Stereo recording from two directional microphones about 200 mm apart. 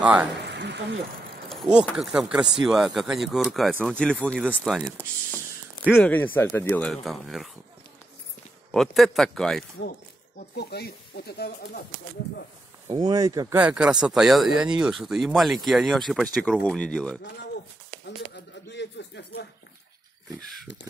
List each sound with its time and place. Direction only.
0.0 s speech: 5° right (ahead or behind)
0.4 s a sound: 60° right (ahead or behind)
1.5 s speech: centre (ahead or behind)
5.9 s speech: 10° left (ahead or behind)
8.7 s speech: centre (ahead or behind)
10.5 s speech: 55° left (ahead or behind)
12.8 s speech: 20° right (ahead or behind); by 17.2 s 5° left (ahead or behind)
18.0 s a sound: 60° left (ahead or behind)